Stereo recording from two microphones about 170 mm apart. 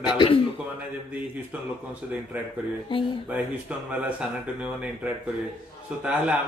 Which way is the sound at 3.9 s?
5° right (ahead or behind).